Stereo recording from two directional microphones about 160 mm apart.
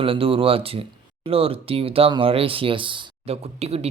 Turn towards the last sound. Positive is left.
turn(degrees=-40)  # may be behind; listen again after turning